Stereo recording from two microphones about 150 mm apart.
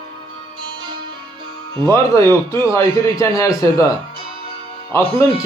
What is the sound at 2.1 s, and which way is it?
A man's voice, 20° left (ahead or behind).